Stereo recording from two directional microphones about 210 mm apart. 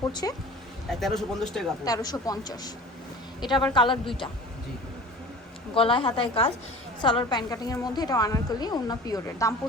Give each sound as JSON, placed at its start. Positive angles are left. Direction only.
{"t": 0.1, "sound": "a woman's voice", "side_deg": 20}
{"t": 0.9, "sound": "speech", "side_deg": 0}
{"t": 1.8, "sound": "a woman's voice", "side_deg": 15}
{"t": 5.7, "sound": "a woman's voice", "side_deg": 25}